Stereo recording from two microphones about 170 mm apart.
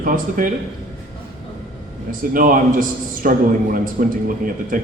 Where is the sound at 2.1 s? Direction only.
55° right (ahead or behind).